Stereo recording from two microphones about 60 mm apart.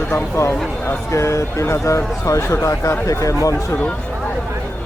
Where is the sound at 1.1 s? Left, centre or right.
Left.